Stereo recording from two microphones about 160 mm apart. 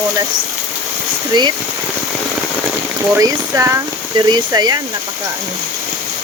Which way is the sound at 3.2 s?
20° right (ahead or behind).